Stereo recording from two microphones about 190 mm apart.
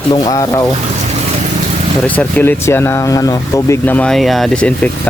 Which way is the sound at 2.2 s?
10° left (ahead or behind).